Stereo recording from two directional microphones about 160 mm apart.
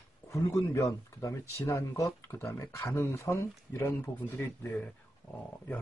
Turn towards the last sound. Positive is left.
turn(degrees=10)  # may be behind; listen again after turning